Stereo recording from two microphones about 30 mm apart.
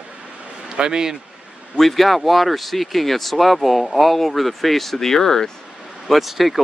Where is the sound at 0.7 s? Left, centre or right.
Right.